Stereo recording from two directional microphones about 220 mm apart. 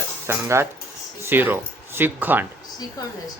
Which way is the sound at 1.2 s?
10° right (ahead or behind).